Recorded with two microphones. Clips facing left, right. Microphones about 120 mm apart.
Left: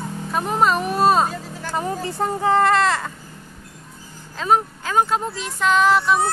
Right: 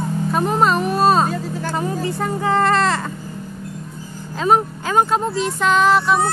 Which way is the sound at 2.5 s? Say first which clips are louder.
Right 1 dB; 5° left (ahead or behind).